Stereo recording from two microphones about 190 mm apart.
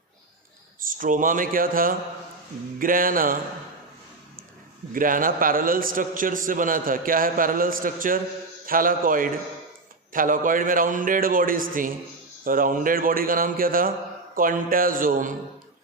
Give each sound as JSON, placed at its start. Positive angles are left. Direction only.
{"t": 0.9, "sound": "a man's voice", "side_deg": -45}
{"t": 4.9, "sound": "a man's voice", "side_deg": -45}